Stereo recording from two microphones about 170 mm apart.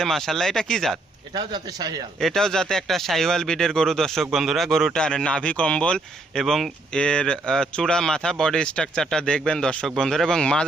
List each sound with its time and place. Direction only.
0.0 s speech: centre (ahead or behind)
1.3 s a man's voice: 25° right (ahead or behind)
2.2 s speech: 5° left (ahead or behind)